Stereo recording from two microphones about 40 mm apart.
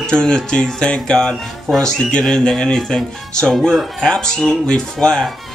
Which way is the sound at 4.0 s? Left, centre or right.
Centre.